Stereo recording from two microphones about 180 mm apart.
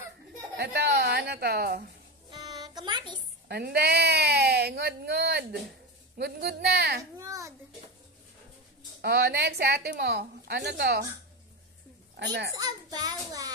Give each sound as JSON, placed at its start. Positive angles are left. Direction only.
{"t": 0.6, "sound": "a woman's voice", "side_deg": -65}
{"t": 2.3, "sound": "a sound", "side_deg": -20}
{"t": 3.4, "sound": "speech", "side_deg": -60}
{"t": 7.0, "sound": "a sound", "side_deg": -20}
{"t": 9.0, "sound": "speech", "side_deg": -65}
{"t": 12.2, "sound": "a child's voice", "side_deg": -75}
{"t": 12.5, "sound": "a child's voice", "side_deg": -20}